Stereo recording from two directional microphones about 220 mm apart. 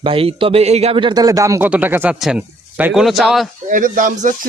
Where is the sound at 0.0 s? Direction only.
25° right (ahead or behind); by 3.5 s centre (ahead or behind).